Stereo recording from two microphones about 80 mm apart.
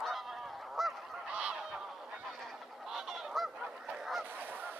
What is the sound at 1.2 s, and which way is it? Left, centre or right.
Goose, centre.